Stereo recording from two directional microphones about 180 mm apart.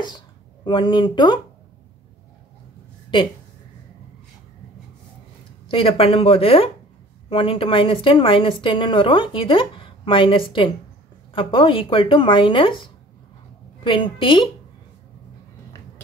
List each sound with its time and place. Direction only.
0.7 s a woman's voice: 25° left (ahead or behind)
5.7 s a woman's voice: 30° left (ahead or behind)